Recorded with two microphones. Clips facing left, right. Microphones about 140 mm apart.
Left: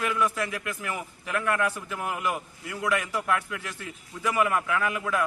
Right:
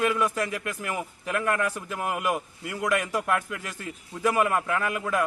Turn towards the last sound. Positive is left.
turn(degrees=-40)  # may be behind; listen again after turning